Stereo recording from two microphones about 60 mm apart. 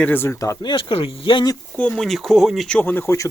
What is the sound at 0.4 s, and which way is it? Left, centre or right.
Speech, left.